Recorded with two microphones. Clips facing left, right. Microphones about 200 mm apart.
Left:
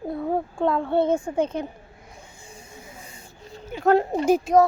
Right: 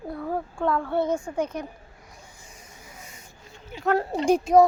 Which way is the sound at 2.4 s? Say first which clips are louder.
Left 5 dB; 30° left (ahead or behind).